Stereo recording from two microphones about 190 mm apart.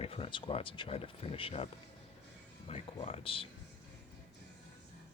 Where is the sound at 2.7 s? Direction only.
30° left (ahead or behind).